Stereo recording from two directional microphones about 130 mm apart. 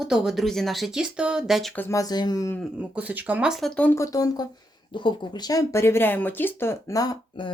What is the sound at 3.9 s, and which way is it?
Speech, 25° left (ahead or behind).